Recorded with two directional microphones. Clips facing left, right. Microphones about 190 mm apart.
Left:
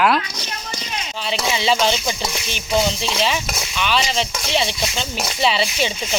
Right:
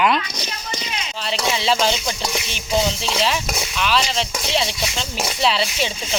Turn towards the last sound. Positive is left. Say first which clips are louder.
# left 1 dB
turn(degrees=0)  # may be behind; listen again after turning